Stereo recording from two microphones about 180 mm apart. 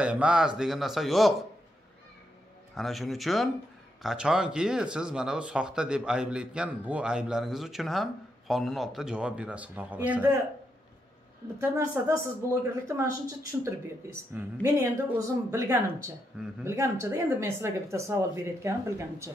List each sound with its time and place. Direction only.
0.0 s speech: 5° right (ahead or behind)
2.7 s speech: centre (ahead or behind)
11.6 s speech: 15° right (ahead or behind)